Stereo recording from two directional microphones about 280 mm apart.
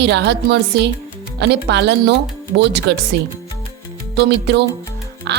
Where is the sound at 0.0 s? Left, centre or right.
Right.